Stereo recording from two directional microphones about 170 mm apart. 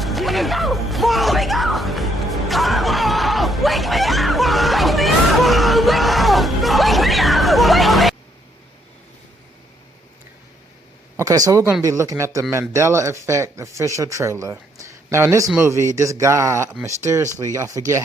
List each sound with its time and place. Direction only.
0.0 s music: centre (ahead or behind)
11.2 s speech: 20° right (ahead or behind)